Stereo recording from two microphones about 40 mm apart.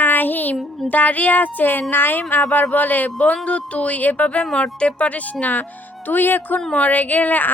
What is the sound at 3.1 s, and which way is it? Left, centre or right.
Speech, left.